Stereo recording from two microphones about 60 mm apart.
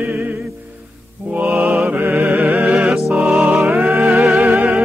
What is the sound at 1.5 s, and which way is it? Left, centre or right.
Mantra, centre.